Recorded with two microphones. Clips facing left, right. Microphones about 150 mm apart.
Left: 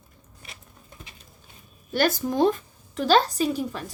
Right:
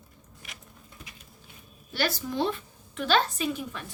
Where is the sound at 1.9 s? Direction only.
45° left (ahead or behind).